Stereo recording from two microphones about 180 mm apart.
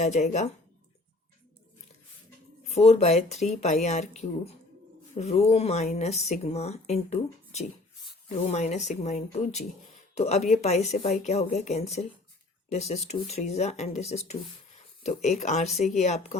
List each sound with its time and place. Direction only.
0.0 s speech: 40° left (ahead or behind)
2.6 s speech: 35° left (ahead or behind)